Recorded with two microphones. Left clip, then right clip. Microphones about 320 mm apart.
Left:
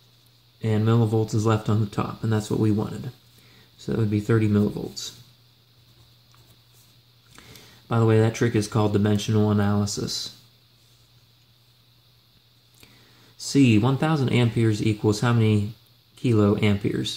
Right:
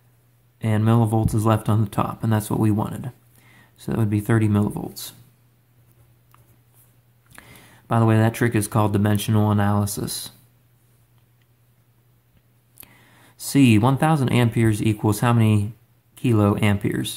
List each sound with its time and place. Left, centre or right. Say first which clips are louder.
0.6 s speech: right 2 dB; centre
7.9 s speech: right 1 dB; centre
13.4 s speech: right 2 dB; centre